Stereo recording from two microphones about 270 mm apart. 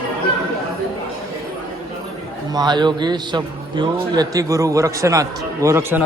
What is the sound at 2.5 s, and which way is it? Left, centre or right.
A man's voice, centre.